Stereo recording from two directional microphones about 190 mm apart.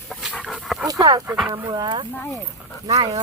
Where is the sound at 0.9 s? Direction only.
20° right (ahead or behind).